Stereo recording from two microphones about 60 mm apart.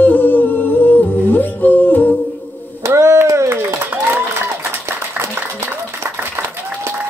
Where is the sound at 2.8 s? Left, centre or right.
Right.